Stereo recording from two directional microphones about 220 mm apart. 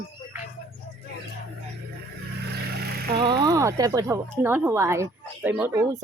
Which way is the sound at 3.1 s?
20° right (ahead or behind).